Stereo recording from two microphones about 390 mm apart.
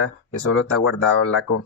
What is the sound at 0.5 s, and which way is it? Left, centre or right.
Speech, left.